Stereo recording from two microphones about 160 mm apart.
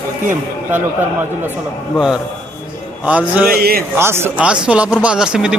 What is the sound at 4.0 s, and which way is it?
Speech, 15° right (ahead or behind).